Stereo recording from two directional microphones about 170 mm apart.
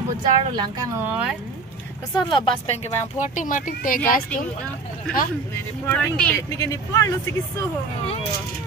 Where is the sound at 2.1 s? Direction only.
30° left (ahead or behind); by 4.2 s 55° left (ahead or behind).